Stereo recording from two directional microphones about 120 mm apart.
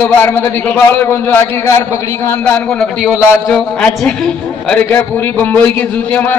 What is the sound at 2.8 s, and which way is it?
A man's voice, 5° left (ahead or behind).